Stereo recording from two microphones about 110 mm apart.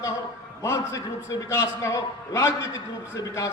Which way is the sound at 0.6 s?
25° left (ahead or behind).